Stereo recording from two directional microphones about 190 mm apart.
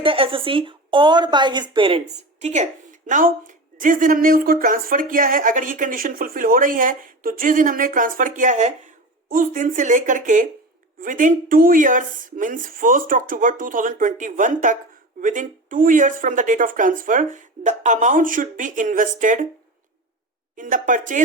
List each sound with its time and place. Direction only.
0.0 s a woman's voice: 30° right (ahead or behind)
20.6 s speech: 45° right (ahead or behind)